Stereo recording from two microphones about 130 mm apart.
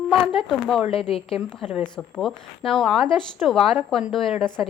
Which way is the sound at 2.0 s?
5° left (ahead or behind).